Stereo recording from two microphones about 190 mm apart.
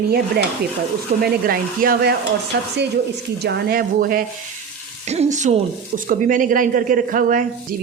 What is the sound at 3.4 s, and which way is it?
Speech, 60° right (ahead or behind).